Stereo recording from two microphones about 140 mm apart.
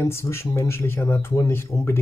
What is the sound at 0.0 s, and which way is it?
Speech, 20° left (ahead or behind).